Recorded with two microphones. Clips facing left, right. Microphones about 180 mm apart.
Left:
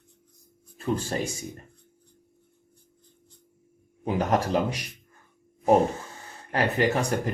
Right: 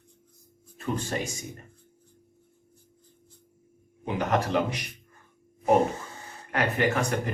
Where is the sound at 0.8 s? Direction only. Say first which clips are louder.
Left 3 dB; 35° left (ahead or behind).